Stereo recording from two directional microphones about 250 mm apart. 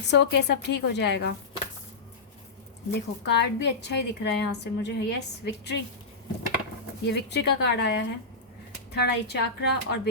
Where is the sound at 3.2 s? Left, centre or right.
Left.